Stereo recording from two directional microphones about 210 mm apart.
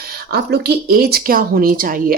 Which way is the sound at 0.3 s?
50° right (ahead or behind).